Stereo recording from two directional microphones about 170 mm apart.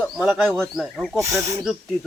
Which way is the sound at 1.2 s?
20° right (ahead or behind).